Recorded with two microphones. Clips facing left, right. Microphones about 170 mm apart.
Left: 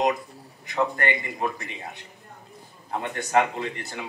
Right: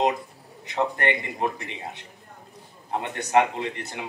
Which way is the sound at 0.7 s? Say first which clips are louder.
Even; 20° right (ahead or behind).